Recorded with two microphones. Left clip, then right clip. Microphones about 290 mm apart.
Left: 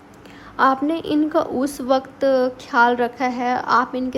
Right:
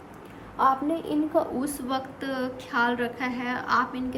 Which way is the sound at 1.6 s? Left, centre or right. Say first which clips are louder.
Left 10 dB; centre.